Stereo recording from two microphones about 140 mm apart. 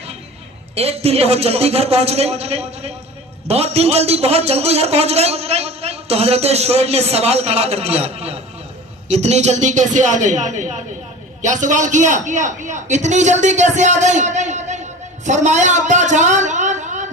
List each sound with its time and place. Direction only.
0.8 s a man's voice: 45° right (ahead or behind)